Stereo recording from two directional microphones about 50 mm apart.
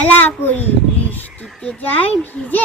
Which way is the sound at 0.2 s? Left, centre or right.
Left.